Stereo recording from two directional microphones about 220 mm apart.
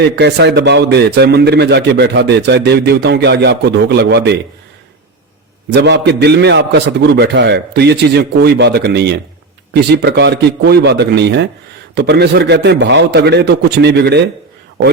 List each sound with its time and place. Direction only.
0.0 s a man's voice: 50° right (ahead or behind)
5.7 s a man's voice: 50° right (ahead or behind)